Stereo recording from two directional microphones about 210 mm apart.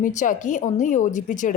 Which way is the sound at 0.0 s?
35° left (ahead or behind).